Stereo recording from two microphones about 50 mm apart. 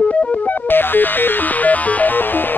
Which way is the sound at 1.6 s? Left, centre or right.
Left.